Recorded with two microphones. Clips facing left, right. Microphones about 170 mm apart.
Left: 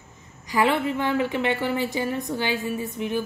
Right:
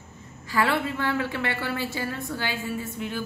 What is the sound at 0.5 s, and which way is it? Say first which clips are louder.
A woman's voice: left 3 dB; 15° left (ahead or behind).